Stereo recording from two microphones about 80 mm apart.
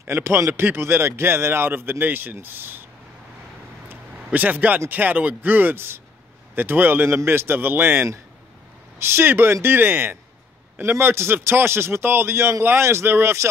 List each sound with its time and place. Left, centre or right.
0.0 s a man's voice: right
3.9 s a man's voice: right